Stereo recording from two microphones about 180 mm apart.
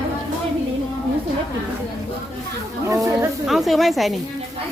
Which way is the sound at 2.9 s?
20° right (ahead or behind).